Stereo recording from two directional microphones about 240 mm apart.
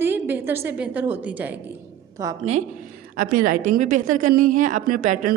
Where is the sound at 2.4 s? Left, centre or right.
Right.